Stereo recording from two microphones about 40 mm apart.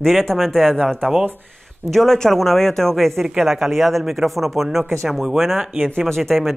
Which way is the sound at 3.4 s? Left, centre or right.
Centre.